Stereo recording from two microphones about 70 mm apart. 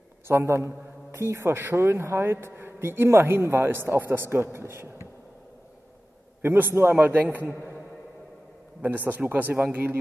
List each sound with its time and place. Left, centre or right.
0.3 s a man's voice: right
6.4 s a man's voice: right
8.8 s a man's voice: right